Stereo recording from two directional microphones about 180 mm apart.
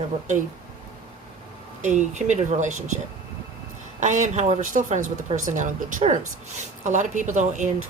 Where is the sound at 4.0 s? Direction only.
45° right (ahead or behind).